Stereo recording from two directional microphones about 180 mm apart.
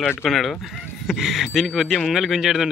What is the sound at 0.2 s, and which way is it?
Speech, centre (ahead or behind).